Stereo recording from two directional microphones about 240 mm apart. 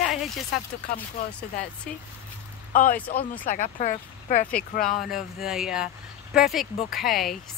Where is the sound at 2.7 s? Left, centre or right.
Left.